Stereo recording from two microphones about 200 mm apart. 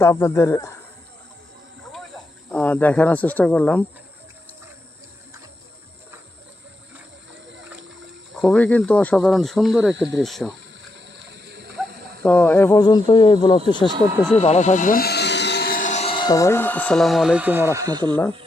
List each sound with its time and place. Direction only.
0.0 s speech: 15° left (ahead or behind)
2.5 s speech: 10° left (ahead or behind)
8.4 s speech: 5° left (ahead or behind)
11.2 s a sound: 60° right (ahead or behind)
12.2 s speech: 10° left (ahead or behind)
14.3 s speech: 35° left (ahead or behind); by 18.2 s 20° right (ahead or behind)